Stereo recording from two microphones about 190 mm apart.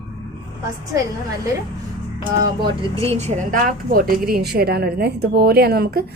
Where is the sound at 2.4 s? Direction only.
25° right (ahead or behind).